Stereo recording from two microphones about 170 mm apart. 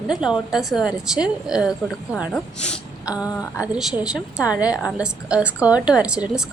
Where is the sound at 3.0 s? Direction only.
5° right (ahead or behind).